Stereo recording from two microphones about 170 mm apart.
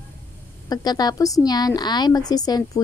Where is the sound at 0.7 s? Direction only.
25° left (ahead or behind).